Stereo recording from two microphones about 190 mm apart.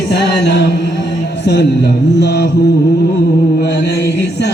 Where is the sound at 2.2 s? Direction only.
65° left (ahead or behind).